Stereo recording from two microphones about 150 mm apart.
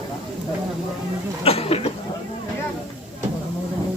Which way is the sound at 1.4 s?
40° left (ahead or behind).